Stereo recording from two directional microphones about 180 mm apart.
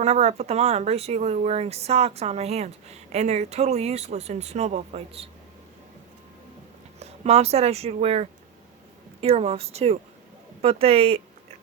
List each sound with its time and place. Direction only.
0.0 s speech: 35° right (ahead or behind)
7.0 s speech: 35° right (ahead or behind)